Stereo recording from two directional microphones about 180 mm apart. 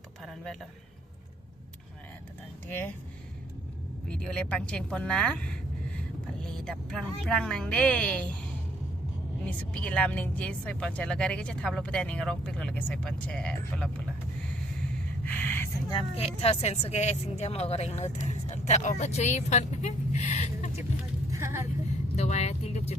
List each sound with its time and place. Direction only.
0.2 s a sound: centre (ahead or behind)
2.6 s speech: 10° left (ahead or behind)
4.1 s speech: 5° left (ahead or behind)
9.4 s speech: 5° left (ahead or behind)
15.2 s a sound: 10° left (ahead or behind)
15.9 s speech: 30° left (ahead or behind)
21.2 s vehicle: 15° right (ahead or behind)
22.1 s speech: 40° left (ahead or behind)